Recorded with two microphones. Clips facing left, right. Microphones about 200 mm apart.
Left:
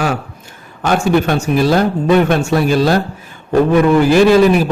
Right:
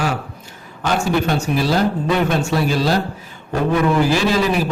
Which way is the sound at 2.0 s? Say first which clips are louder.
Left 6 dB; 55° left (ahead or behind).